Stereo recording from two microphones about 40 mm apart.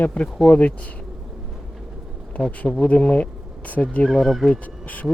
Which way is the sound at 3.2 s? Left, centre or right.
Left.